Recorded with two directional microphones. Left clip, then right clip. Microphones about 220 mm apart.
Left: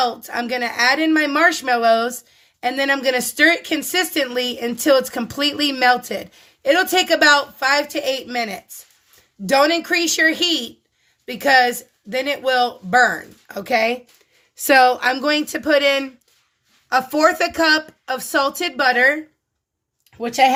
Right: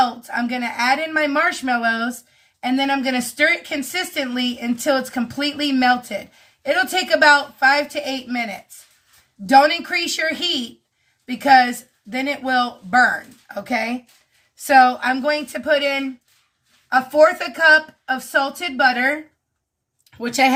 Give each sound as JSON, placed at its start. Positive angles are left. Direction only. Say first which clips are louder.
{"t": 0.0, "sound": "speech", "louder": "right 1 dB", "side_deg": 45}
{"t": 16.9, "sound": "speech", "louder": "right 2 dB", "side_deg": 50}
{"t": 20.1, "sound": "speech", "louder": "left 2 dB", "side_deg": 15}